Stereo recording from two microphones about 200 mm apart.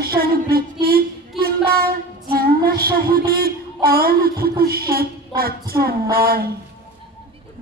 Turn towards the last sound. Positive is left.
turn(degrees=-50)  # may be behind; listen again after turning